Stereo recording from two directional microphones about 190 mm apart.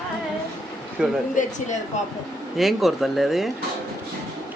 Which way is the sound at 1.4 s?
40° left (ahead or behind).